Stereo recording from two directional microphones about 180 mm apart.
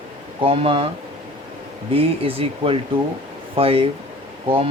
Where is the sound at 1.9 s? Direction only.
30° right (ahead or behind).